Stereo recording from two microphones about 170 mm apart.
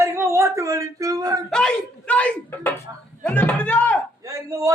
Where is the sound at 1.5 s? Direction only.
5° left (ahead or behind).